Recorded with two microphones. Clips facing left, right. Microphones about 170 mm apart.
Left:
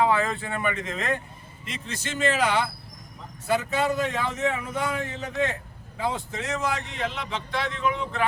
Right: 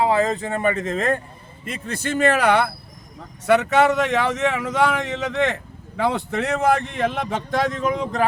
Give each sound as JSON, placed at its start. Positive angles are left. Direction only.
{"t": 0.0, "sound": "speech", "side_deg": -35}
{"t": 3.4, "sound": "speech", "side_deg": -75}